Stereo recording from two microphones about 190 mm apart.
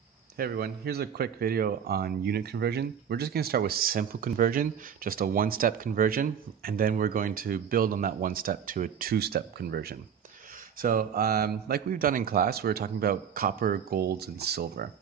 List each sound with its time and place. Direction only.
0.4 s speech: 55° right (ahead or behind)